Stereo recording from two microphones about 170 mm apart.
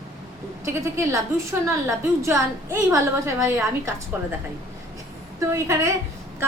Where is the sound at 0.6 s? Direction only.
15° right (ahead or behind).